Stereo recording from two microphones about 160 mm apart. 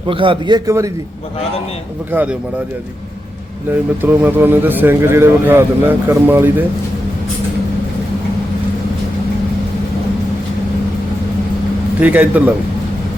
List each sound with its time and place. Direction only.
0.1 s a man's voice: 30° right (ahead or behind)
3.7 s speech: 15° right (ahead or behind)
11.9 s speech: 10° right (ahead or behind)